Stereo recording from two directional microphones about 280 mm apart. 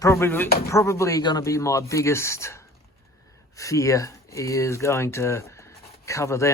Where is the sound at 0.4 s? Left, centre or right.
Left.